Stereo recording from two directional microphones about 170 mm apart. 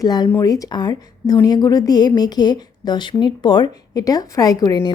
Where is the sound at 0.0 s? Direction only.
25° left (ahead or behind).